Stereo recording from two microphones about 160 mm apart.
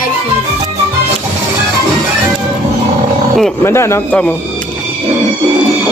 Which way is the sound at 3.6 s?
15° left (ahead or behind).